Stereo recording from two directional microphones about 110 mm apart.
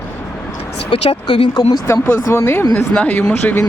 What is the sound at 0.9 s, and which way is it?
Speech, 65° left (ahead or behind).